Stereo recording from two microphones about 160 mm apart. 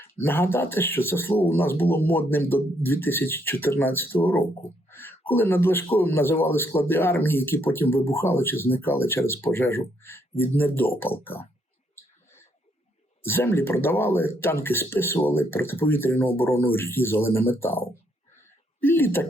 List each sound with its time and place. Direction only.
0.0 s speech: 15° left (ahead or behind)
13.2 s speech: 15° left (ahead or behind)